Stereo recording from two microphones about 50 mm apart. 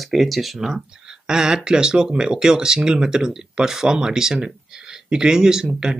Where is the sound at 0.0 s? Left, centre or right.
Centre.